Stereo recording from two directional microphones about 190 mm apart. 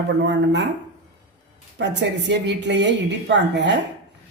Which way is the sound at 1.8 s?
65° right (ahead or behind).